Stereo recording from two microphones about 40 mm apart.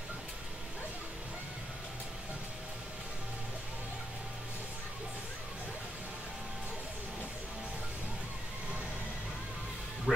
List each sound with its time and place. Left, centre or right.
10.1 s music: right